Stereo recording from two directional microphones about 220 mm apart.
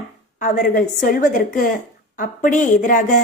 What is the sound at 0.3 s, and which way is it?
A woman's voice, 35° left (ahead or behind).